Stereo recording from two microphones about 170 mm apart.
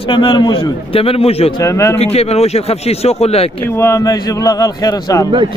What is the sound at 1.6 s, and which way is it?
Speech, 20° left (ahead or behind).